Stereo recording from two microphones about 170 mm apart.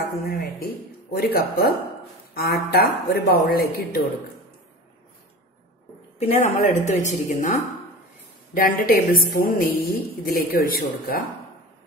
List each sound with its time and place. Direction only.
1.1 s a woman's voice: 65° left (ahead or behind)
6.1 s a woman's voice: 40° left (ahead or behind); by 11.1 s 60° left (ahead or behind)